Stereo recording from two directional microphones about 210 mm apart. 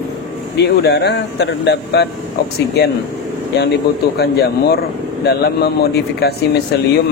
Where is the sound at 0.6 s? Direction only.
50° left (ahead or behind).